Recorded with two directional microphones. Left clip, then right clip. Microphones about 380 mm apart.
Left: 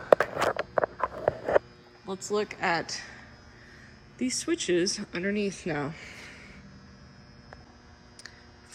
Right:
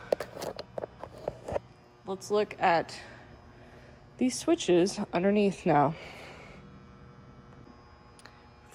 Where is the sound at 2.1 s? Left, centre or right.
Centre.